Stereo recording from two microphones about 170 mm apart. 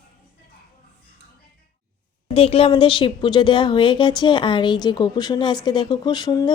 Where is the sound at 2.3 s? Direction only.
35° left (ahead or behind).